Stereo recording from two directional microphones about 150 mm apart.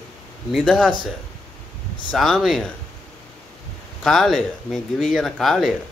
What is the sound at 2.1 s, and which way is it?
Speech, centre (ahead or behind).